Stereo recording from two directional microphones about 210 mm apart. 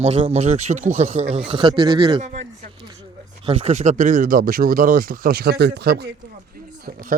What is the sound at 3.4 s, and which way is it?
Speech, 30° right (ahead or behind).